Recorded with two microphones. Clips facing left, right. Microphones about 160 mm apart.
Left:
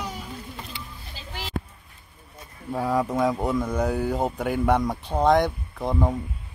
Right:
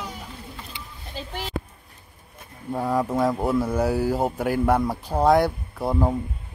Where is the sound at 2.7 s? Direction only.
Centre (ahead or behind).